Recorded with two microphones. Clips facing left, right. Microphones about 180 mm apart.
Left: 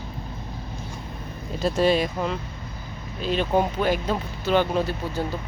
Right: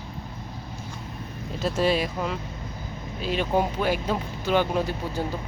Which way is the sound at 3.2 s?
10° right (ahead or behind).